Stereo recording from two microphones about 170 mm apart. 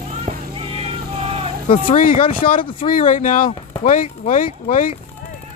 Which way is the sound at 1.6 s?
30° left (ahead or behind).